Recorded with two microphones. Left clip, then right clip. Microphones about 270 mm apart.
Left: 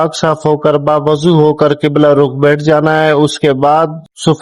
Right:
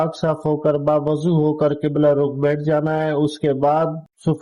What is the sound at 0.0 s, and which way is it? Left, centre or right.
A man's voice, left.